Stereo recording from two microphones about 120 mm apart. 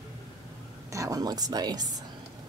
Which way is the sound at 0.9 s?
30° right (ahead or behind).